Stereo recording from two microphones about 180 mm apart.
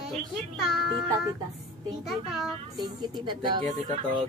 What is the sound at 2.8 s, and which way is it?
Speech, 25° right (ahead or behind).